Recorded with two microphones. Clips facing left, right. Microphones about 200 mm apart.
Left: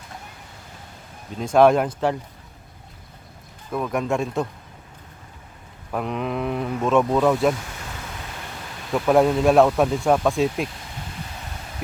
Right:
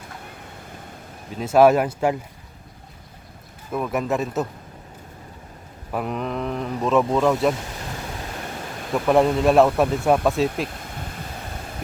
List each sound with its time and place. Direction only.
1.4 s speech: 5° right (ahead or behind)
3.7 s speech: 5° right (ahead or behind)
5.9 s speech: 5° right (ahead or behind)
8.9 s speech: centre (ahead or behind)